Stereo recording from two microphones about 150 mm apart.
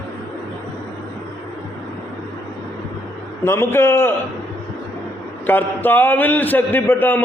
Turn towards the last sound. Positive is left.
turn(degrees=15)  # may be behind; listen again after turning